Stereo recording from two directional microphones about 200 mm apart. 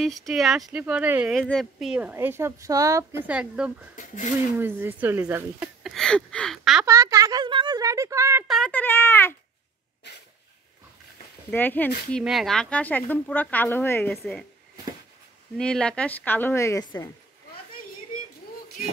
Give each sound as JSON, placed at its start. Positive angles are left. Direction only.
{"t": 0.0, "sound": "speech", "side_deg": 0}
{"t": 3.9, "sound": "speech", "side_deg": 40}
{"t": 4.6, "sound": "speech", "side_deg": -10}
{"t": 6.9, "sound": "speech", "side_deg": -15}
{"t": 8.5, "sound": "speech", "side_deg": 5}
{"t": 11.5, "sound": "speech", "side_deg": 10}
{"t": 14.1, "sound": "speech", "side_deg": 0}
{"t": 15.5, "sound": "speech", "side_deg": 5}